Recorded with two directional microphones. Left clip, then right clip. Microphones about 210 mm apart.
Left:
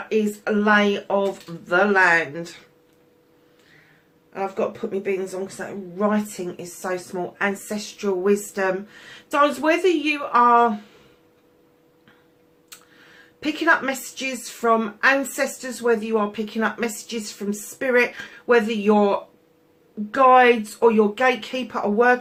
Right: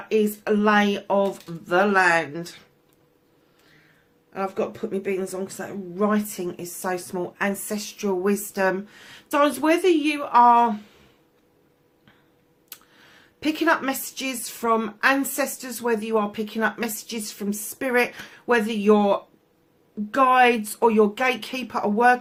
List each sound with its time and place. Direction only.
0.1 s a woman's voice: 50° right (ahead or behind)
4.3 s a woman's voice: 45° right (ahead or behind)
13.4 s a woman's voice: 50° right (ahead or behind)